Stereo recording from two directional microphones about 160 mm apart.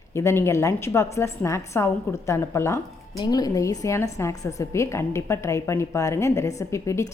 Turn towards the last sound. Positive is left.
turn(degrees=20)  # may be behind; listen again after turning